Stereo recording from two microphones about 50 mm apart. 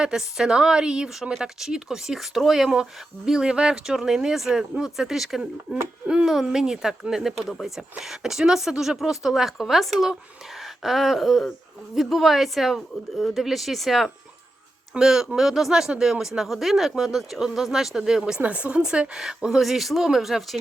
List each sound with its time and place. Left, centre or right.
0.0 s speech: centre
1.3 s speech: centre
18.3 s speech: right
18.8 s speech: centre